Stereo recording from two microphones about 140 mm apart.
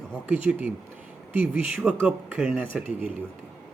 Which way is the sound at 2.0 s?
10° right (ahead or behind).